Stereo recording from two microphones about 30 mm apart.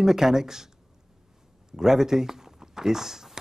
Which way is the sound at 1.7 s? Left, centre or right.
Centre.